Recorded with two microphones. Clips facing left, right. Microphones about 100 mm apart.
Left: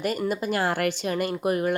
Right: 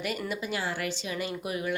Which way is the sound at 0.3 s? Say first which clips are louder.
Left 7 dB; 45° left (ahead or behind).